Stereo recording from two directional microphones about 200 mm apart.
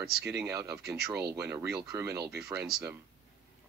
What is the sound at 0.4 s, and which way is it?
Speech, 15° right (ahead or behind).